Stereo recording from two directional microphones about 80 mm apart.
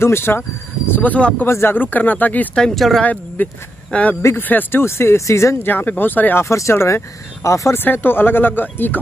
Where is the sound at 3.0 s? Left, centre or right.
Centre; by 5.5 s left.